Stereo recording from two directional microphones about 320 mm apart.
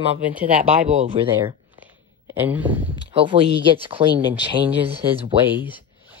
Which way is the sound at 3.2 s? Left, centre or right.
Centre.